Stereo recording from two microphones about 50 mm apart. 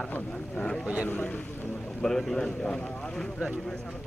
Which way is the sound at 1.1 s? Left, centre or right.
Left.